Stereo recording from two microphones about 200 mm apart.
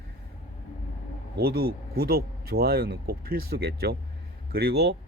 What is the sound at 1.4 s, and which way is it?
A man's voice, 50° right (ahead or behind).